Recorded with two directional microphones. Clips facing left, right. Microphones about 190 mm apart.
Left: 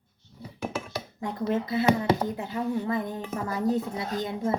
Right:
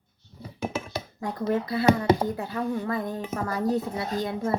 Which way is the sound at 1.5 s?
20° left (ahead or behind).